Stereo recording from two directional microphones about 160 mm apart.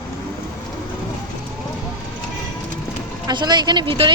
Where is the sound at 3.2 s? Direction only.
25° right (ahead or behind).